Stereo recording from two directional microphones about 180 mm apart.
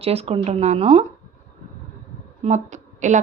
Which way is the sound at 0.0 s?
35° right (ahead or behind).